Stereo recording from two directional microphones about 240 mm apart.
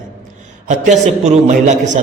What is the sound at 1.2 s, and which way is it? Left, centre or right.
Speech, right.